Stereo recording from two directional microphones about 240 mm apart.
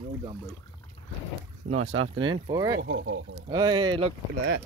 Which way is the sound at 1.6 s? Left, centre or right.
Right.